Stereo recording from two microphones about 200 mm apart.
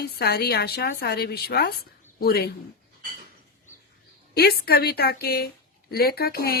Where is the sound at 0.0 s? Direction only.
50° left (ahead or behind).